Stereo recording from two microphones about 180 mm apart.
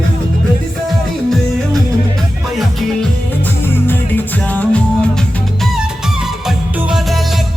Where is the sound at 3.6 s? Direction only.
10° left (ahead or behind).